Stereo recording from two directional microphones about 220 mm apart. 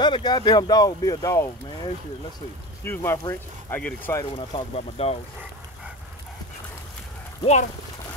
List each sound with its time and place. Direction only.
0.0 s speech: 20° left (ahead or behind)